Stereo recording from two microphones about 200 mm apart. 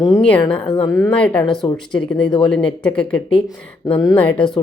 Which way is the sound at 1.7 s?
25° left (ahead or behind).